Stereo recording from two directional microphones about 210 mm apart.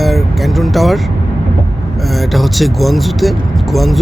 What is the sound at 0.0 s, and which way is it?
Vehicle, centre (ahead or behind).